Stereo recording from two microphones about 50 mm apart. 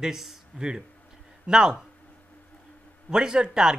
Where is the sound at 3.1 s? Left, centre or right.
Centre.